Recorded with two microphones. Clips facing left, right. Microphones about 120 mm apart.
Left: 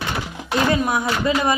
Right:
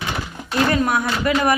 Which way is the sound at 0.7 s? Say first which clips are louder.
Right 1 dB; 20° left (ahead or behind).